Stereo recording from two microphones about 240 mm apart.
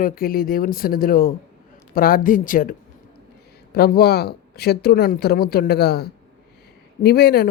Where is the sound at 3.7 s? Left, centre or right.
Left.